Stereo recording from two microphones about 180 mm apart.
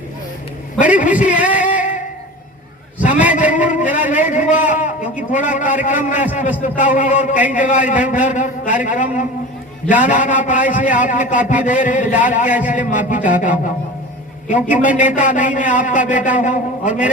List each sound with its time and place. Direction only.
1.5 s singing: 45° left (ahead or behind)
3.0 s a sound: 45° left (ahead or behind)
3.3 s vehicle: 45° left (ahead or behind)
3.9 s a man's voice: 45° left (ahead or behind)